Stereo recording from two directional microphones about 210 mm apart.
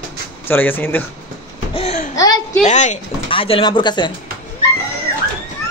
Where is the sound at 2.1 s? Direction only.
20° left (ahead or behind).